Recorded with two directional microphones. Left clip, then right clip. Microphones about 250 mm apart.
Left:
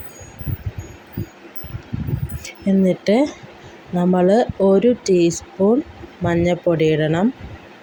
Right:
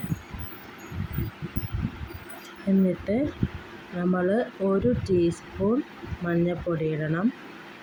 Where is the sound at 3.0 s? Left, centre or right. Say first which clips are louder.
Left 10 dB; centre.